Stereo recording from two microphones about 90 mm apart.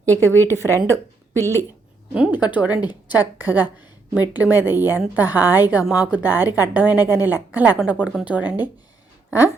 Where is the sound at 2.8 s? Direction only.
55° left (ahead or behind).